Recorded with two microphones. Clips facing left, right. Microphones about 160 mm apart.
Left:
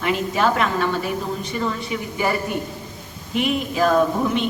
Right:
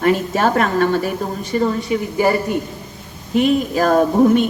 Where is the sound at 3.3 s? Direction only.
40° right (ahead or behind).